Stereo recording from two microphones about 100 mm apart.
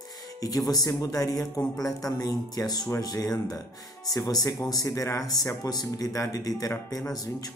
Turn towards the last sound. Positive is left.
turn(degrees=40)  # may be behind; listen again after turning